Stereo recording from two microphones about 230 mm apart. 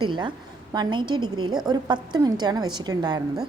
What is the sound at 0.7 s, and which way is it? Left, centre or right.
A woman's voice, centre.